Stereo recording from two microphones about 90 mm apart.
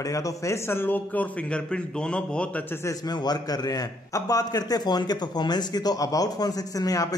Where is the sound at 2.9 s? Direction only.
45° left (ahead or behind).